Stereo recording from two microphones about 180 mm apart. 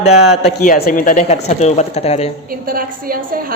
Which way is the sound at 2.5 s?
55° right (ahead or behind).